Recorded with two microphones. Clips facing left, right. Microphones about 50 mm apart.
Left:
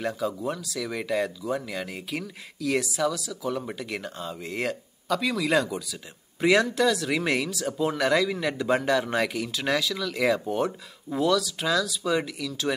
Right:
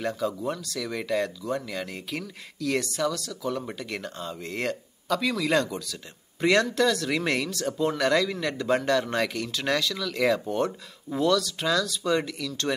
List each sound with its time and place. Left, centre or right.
0.0 s speech: centre